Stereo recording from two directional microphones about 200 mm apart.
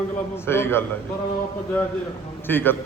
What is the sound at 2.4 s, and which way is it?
Speech, 10° left (ahead or behind).